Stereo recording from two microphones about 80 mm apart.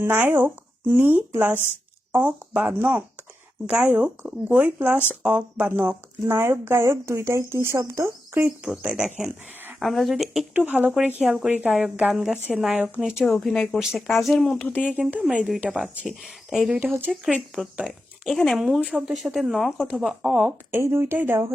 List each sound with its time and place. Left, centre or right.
0.0 s speech: right
8.3 s cricket: right
8.6 s speech: centre
10.5 s speech: centre
11.2 s speech: centre
11.4 s speech: centre
14.6 s speech: centre
14.8 s speech: centre
16.0 s speech: centre
17.8 s speech: centre
18.3 s speech: centre
20.7 s speech: right